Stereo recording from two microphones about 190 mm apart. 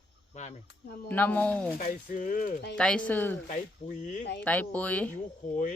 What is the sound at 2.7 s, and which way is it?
Speech, 5° left (ahead or behind).